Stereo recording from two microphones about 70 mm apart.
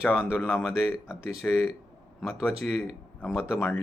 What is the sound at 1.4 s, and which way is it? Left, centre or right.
Speech, centre.